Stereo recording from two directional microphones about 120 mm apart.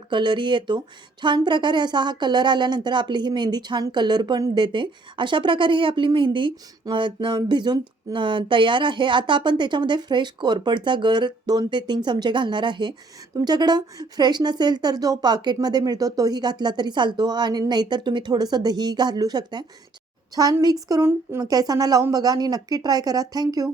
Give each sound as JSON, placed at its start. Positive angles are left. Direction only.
{"t": 0.1, "sound": "a woman's voice", "side_deg": -40}